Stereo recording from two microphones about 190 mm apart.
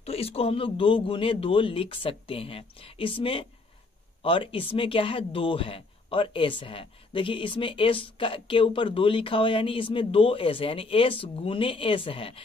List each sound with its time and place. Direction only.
0.0 s speech: 30° left (ahead or behind)